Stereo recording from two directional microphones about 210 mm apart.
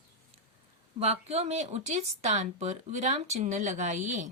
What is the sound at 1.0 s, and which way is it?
Speech, 30° right (ahead or behind).